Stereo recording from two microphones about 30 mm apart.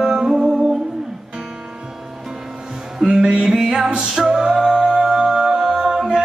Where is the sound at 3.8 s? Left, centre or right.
Right.